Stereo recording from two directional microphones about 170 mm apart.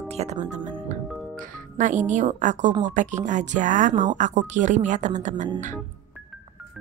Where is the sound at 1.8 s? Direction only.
45° right (ahead or behind).